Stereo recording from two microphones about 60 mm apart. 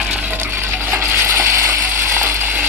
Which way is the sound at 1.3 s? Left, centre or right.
Right.